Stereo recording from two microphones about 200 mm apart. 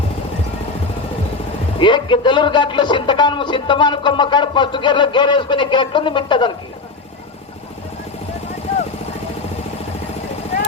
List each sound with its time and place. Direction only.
1.8 s a man's voice: 25° left (ahead or behind)